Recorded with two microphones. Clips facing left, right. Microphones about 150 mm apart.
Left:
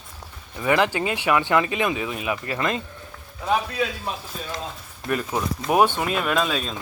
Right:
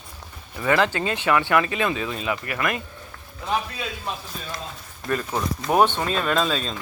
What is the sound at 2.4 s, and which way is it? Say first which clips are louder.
Speech: left 1 dB; 25° left (ahead or behind).